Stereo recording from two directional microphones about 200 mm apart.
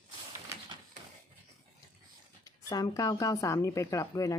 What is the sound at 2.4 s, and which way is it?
Speech, 20° left (ahead or behind).